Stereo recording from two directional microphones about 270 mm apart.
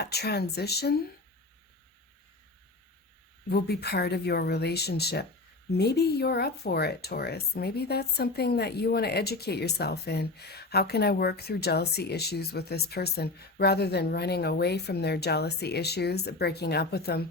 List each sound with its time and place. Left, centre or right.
0.0 s speech: left
3.5 s speech: left